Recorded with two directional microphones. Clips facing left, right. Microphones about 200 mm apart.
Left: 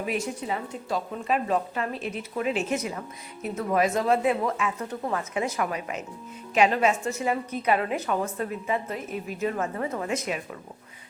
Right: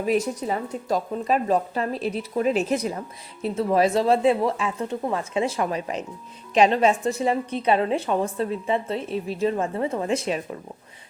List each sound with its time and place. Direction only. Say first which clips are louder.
0.0 s a woman's voice: right 6 dB; 40° right (ahead or behind)